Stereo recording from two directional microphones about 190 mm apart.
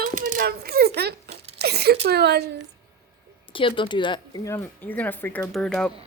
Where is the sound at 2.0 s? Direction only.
60° right (ahead or behind).